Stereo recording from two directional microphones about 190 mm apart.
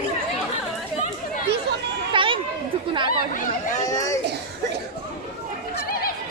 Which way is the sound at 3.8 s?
15° left (ahead or behind).